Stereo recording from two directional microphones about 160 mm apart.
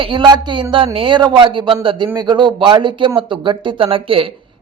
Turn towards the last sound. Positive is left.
turn(degrees=-35)  # may be behind; listen again after turning